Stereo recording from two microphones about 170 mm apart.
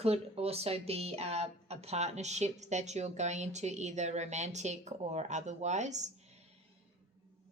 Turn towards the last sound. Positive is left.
turn(degrees=-45)  # may be behind; listen again after turning